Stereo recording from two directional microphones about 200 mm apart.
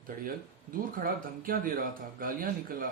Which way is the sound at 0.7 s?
45° right (ahead or behind).